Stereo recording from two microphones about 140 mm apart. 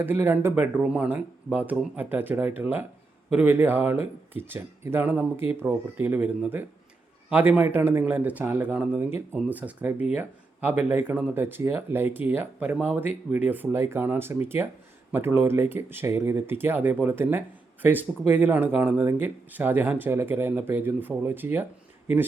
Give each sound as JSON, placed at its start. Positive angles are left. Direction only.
{"t": 0.0, "sound": "speech", "side_deg": -15}